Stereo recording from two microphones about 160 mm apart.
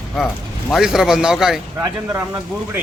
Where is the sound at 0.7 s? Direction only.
5° right (ahead or behind).